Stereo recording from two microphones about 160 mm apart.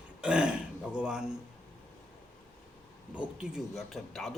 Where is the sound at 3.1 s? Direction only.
5° right (ahead or behind).